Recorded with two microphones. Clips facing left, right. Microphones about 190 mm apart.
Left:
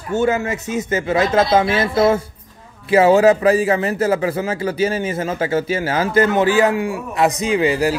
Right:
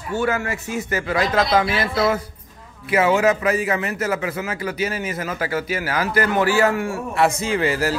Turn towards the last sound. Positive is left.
turn(degrees=15)  # may be behind; listen again after turning